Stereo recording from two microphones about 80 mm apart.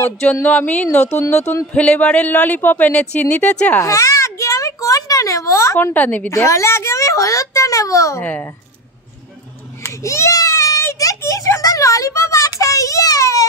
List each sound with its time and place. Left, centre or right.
0.2 s speech: centre
1.3 s speech: left
1.7 s speech: centre
3.8 s a sound: left
5.9 s speech: left
6.3 s a child's voice: left
8.2 s speech: left
9.8 s a sound: left